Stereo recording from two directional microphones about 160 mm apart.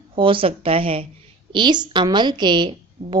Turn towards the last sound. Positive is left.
turn(degrees=-30)  # may be behind; listen again after turning